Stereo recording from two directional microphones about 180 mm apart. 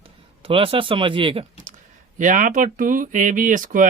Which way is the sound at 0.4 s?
30° right (ahead or behind).